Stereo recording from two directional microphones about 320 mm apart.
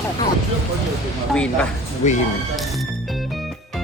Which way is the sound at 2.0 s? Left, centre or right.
Left.